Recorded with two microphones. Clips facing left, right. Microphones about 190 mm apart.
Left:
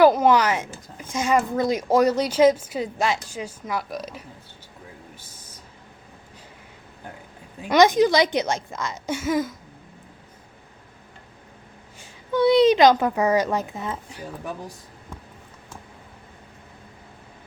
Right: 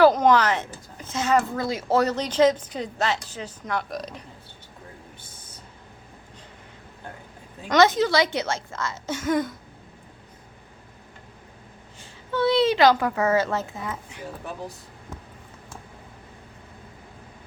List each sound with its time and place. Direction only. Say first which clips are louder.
0.0 s speech: left 1 dB; 10° left (ahead or behind)
7.7 s speech: left 3 dB; 15° left (ahead or behind)
11.9 s a woman's voice: left 4 dB; 15° left (ahead or behind)
13.8 s speech: left 2 dB; 30° left (ahead or behind)